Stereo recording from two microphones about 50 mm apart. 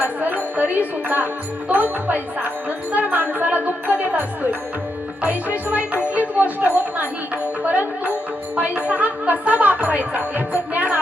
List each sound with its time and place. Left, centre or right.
0.2 s speech: right
5.6 s music: right
6.7 s speech: right
7.6 s music: right
9.0 s music: right